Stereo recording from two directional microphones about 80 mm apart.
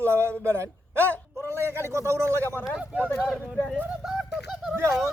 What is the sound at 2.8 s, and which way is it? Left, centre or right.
Speech, centre.